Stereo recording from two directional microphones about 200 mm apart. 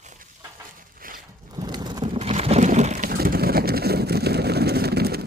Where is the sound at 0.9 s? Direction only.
45° right (ahead or behind).